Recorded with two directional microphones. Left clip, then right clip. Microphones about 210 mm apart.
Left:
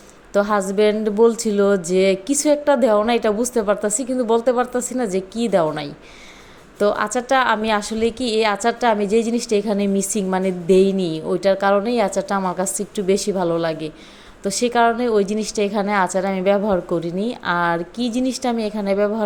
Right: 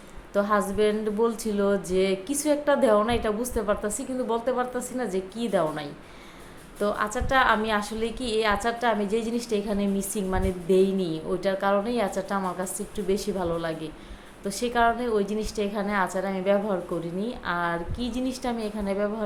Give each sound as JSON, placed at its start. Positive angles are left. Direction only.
{"t": 0.3, "sound": "a woman's voice", "side_deg": 35}